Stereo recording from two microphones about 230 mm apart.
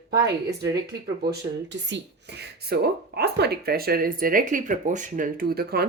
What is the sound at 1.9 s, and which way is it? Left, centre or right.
Speech, right.